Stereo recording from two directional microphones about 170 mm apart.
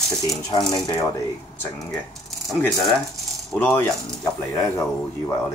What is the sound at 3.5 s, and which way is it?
Speech, 10° left (ahead or behind).